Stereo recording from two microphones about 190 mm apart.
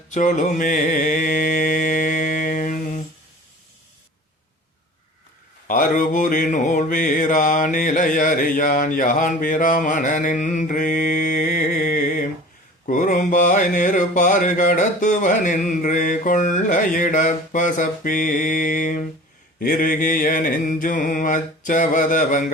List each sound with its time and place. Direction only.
0.1 s mantra: 40° left (ahead or behind)
5.6 s mantra: 45° left (ahead or behind)